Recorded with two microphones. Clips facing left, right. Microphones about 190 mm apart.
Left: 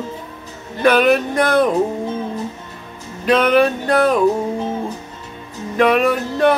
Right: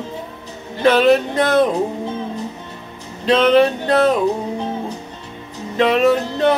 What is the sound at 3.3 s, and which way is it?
Music, 25° right (ahead or behind).